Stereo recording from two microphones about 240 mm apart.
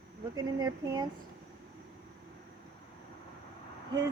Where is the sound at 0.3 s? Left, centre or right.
Centre.